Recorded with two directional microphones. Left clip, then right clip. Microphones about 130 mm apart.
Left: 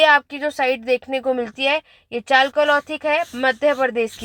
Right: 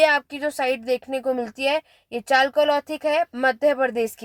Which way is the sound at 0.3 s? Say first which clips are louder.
Left 3 dB; 20° left (ahead or behind).